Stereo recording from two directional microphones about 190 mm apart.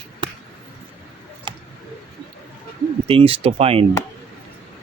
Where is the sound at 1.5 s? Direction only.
25° right (ahead or behind).